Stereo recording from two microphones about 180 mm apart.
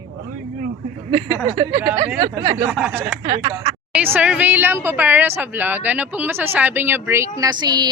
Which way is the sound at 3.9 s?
10° right (ahead or behind).